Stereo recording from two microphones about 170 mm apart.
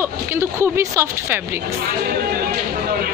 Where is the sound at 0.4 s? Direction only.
15° right (ahead or behind).